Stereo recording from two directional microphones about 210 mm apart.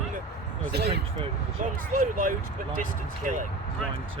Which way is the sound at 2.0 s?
40° right (ahead or behind).